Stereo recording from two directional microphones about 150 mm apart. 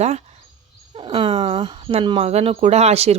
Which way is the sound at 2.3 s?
40° right (ahead or behind).